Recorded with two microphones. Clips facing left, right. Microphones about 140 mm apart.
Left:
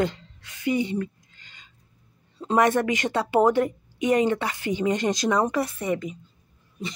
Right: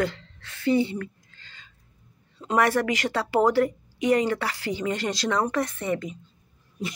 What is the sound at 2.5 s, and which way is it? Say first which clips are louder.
Speech: left 2 dB; 20° left (ahead or behind).